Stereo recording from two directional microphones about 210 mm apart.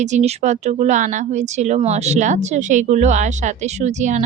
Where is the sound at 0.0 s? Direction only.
35° right (ahead or behind).